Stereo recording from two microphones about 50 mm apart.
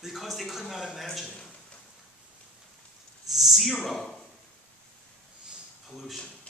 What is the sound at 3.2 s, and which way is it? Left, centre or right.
Speech, centre.